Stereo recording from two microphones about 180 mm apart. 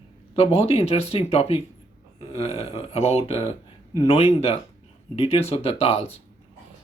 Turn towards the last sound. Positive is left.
turn(degrees=35)  # may be behind; listen again after turning